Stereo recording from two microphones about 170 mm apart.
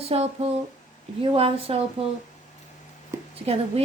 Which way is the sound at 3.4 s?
35° right (ahead or behind).